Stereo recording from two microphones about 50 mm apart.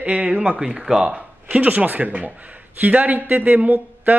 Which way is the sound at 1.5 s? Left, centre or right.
Right.